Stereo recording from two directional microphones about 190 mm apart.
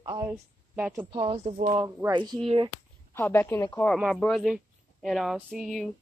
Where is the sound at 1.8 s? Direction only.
20° right (ahead or behind).